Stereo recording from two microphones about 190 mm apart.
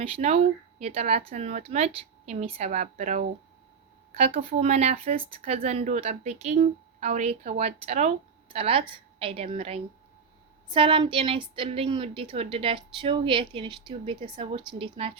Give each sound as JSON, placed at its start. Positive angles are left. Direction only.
{"t": 0.0, "sound": "a woman's voice", "side_deg": -35}